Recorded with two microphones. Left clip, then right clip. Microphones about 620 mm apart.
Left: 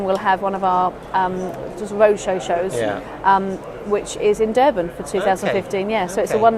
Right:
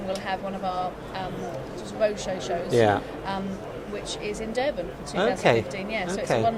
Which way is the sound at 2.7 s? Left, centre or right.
Right.